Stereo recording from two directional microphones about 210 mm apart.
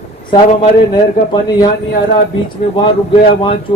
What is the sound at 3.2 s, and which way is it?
Speech, 25° left (ahead or behind).